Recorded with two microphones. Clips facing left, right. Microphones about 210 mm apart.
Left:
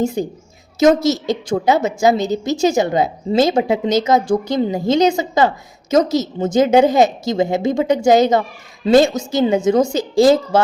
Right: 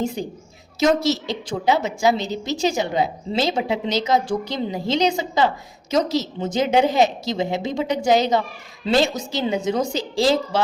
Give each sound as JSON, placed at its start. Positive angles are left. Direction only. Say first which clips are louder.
{"t": 0.2, "sound": "a woman's voice", "louder": "left 7 dB", "side_deg": 45}